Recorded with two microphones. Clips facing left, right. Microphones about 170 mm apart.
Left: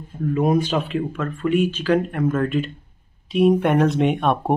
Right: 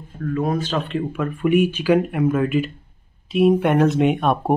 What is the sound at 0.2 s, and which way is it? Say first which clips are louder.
Speech: left 3 dB; 20° left (ahead or behind).